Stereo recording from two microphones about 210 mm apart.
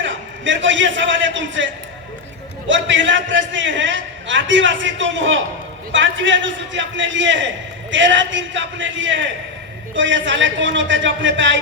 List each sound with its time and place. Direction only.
0.0 s a man's voice: 60° right (ahead or behind)